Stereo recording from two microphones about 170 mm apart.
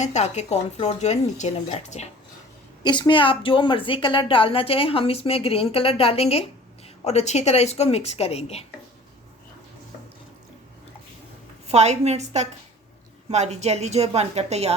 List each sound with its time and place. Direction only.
0.0 s a woman's voice: 45° left (ahead or behind)
2.8 s a woman's voice: 25° left (ahead or behind)
11.7 s a woman's voice: 40° right (ahead or behind)